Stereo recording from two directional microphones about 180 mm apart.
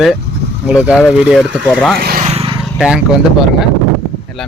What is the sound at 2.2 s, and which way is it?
Vehicle, 35° right (ahead or behind).